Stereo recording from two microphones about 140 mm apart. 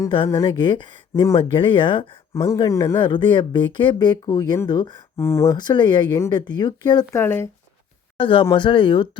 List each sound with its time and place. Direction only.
0.4 s speech: 35° left (ahead or behind)
2.3 s speech: 20° left (ahead or behind)
5.1 s speech: 20° left (ahead or behind)
5.5 s speech: 30° left (ahead or behind)
7.2 s speech: 15° left (ahead or behind)
8.2 s speech: 35° left (ahead or behind)